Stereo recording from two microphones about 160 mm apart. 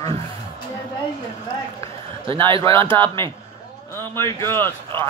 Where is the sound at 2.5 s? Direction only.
35° right (ahead or behind).